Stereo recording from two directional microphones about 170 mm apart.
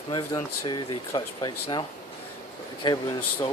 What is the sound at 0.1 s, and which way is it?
Speech, 25° left (ahead or behind).